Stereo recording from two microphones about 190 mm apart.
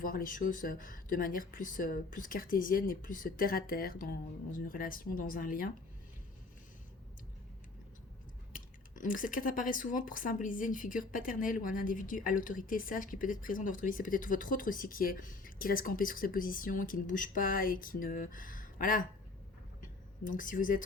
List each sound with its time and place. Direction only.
0.0 s speech: 45° left (ahead or behind)
8.5 s speech: 45° left (ahead or behind)
20.2 s speech: 45° left (ahead or behind)